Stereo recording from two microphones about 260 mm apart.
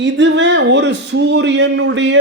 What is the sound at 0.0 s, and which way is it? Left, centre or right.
Speech, right.